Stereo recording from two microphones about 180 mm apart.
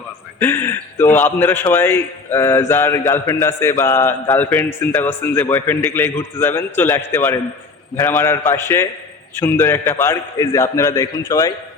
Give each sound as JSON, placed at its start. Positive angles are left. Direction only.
{"t": 0.3, "sound": "mantra", "side_deg": 10}